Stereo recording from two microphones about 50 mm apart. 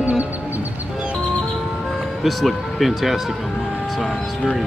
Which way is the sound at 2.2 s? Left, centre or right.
Centre.